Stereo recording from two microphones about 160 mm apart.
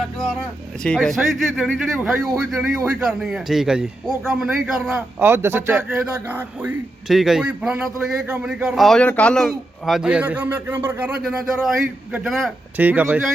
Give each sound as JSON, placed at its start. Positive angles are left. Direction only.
{"t": 0.8, "sound": "a man's voice", "side_deg": 5}
{"t": 5.7, "sound": "a man's voice", "side_deg": -5}